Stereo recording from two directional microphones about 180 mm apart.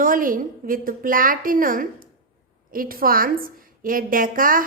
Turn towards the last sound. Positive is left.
turn(degrees=-50)  # may be behind; listen again after turning